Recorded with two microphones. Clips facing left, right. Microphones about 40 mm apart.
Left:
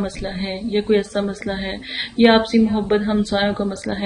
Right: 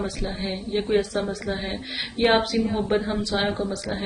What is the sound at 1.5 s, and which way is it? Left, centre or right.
Speech, left.